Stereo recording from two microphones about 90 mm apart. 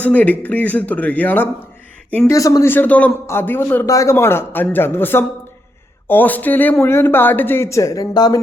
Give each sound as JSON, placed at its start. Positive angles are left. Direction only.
{"t": 0.0, "sound": "speech", "side_deg": 20}
{"t": 2.3, "sound": "speech", "side_deg": 40}
{"t": 2.6, "sound": "speech", "side_deg": 20}
{"t": 3.8, "sound": "speech", "side_deg": 35}